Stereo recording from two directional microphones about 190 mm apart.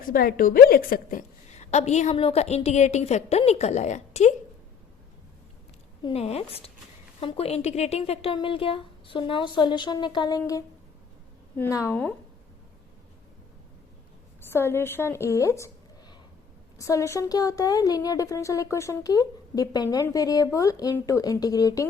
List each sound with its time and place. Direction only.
0.1 s a woman's voice: 50° left (ahead or behind)
1.5 s a woman's voice: 35° left (ahead or behind)
6.0 s a woman's voice: 30° left (ahead or behind); by 12.1 s 10° left (ahead or behind)
14.5 s a woman's voice: 10° left (ahead or behind)